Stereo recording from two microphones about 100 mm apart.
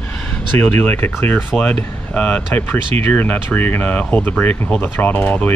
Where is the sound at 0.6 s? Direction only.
15° left (ahead or behind).